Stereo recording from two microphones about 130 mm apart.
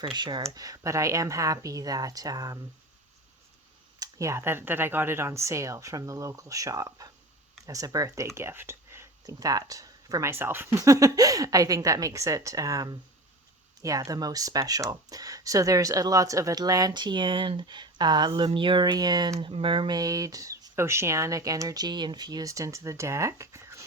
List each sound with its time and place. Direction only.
0.0 s speech: 35° right (ahead or behind)
4.0 s speech: 25° right (ahead or behind)